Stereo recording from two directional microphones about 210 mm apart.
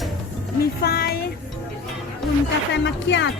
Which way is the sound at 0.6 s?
45° left (ahead or behind).